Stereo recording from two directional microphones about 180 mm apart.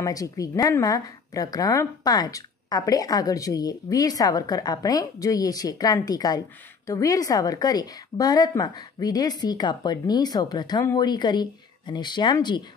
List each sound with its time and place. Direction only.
0.0 s a woman's voice: 20° left (ahead or behind)